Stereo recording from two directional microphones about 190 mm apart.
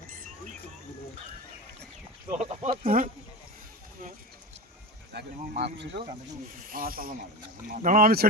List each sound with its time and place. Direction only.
0.1 s a sound: 45° right (ahead or behind)
2.4 s speech: 45° right (ahead or behind)
5.1 s speech: 60° right (ahead or behind)
6.6 s speech: 45° right (ahead or behind)